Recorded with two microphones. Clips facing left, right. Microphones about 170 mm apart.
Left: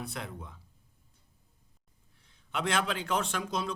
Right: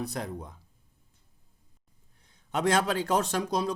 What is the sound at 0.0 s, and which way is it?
Speech, 40° right (ahead or behind).